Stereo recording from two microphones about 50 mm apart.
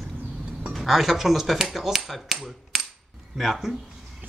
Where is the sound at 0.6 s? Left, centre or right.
Centre.